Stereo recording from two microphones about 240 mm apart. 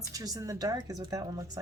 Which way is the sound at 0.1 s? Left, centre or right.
Centre.